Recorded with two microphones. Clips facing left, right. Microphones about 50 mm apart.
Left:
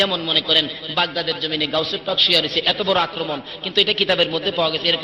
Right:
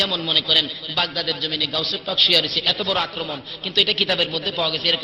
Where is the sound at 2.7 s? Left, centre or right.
Centre.